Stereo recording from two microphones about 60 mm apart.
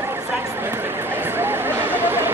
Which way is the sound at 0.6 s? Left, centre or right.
Right.